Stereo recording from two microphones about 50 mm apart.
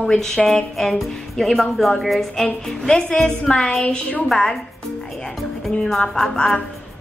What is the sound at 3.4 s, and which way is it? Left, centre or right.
Speech, centre.